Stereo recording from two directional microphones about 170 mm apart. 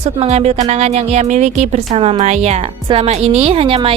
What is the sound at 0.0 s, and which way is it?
Speech, 40° right (ahead or behind).